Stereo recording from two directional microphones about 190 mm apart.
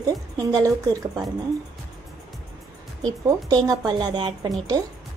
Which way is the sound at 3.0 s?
20° right (ahead or behind).